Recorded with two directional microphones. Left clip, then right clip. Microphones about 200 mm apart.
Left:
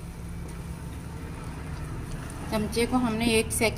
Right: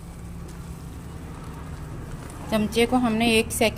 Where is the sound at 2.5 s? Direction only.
55° right (ahead or behind).